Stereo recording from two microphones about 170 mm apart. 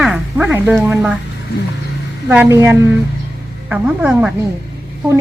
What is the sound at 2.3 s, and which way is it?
A woman's voice, 15° right (ahead or behind).